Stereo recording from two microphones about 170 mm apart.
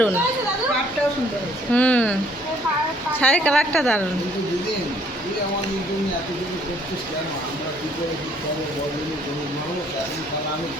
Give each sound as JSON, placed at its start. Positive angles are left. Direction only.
{"t": 1.7, "sound": "a woman's voice", "side_deg": 10}
{"t": 3.2, "sound": "a woman's voice", "side_deg": 10}